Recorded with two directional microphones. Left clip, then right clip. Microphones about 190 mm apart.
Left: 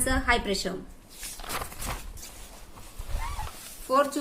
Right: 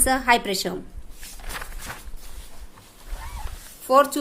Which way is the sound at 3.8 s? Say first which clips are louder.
Right 7 dB; 55° right (ahead or behind).